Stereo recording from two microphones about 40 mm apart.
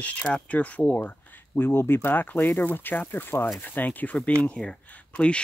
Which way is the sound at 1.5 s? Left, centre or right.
Left.